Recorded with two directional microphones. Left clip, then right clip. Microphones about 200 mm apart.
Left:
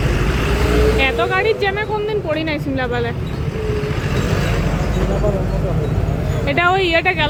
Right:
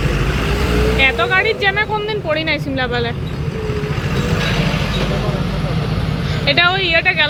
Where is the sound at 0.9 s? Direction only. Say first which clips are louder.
Right 3 dB; 10° left (ahead or behind).